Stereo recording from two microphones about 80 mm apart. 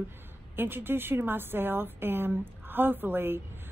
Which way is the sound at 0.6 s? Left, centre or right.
Right.